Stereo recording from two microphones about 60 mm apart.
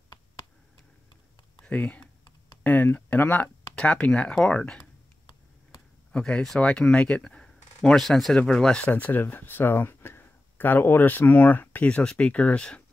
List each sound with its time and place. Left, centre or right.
1.7 s speech: left
3.7 s speech: centre
6.1 s speech: centre
6.4 s speech: centre
8.8 s speech: left
11.9 s speech: centre